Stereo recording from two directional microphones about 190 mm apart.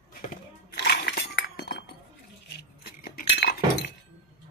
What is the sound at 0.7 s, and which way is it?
Chink, 55° left (ahead or behind).